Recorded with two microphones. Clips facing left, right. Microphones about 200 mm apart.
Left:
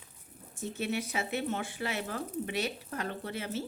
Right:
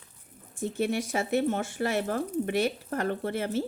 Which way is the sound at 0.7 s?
50° right (ahead or behind).